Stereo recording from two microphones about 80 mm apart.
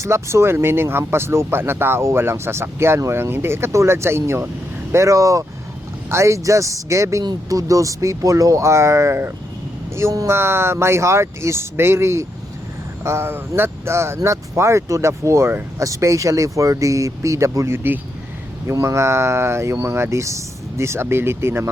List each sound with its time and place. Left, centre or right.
0.0 s speech: right